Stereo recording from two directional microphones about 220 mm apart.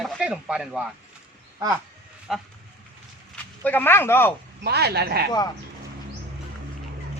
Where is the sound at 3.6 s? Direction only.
10° left (ahead or behind).